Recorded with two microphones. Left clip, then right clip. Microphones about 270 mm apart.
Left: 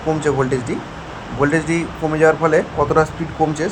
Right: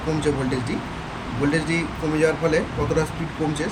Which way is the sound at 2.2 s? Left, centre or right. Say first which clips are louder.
Left 7 dB; centre.